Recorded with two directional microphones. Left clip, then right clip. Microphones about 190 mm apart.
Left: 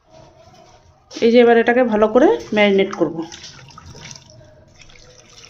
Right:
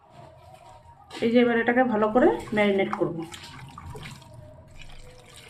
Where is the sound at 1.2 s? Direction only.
50° left (ahead or behind).